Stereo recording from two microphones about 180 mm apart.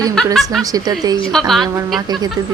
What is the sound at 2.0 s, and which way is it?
Speech, 20° right (ahead or behind).